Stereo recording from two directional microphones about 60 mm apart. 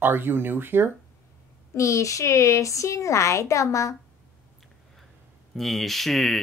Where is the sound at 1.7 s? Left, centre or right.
Left.